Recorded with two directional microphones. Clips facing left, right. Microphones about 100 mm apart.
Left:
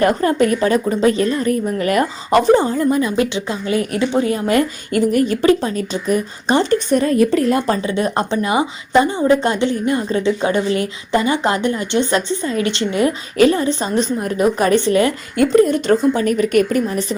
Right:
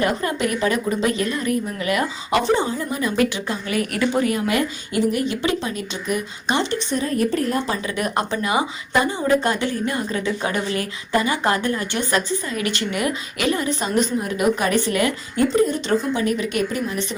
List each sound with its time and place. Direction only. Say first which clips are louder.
0.0 s a woman's voice: left 7 dB; 40° left (ahead or behind)
3.0 s speech: left 3 dB; 25° left (ahead or behind)
4.9 s a woman's voice: left 5 dB; 50° left (ahead or behind)
6.9 s speech: left 6 dB; 80° left
7.8 s a woman's voice: left 5 dB; 30° left (ahead or behind)
15.4 s a woman's voice: left 5 dB; 70° left (ahead or behind)
15.9 s a woman's voice: left 6 dB; 45° left (ahead or behind)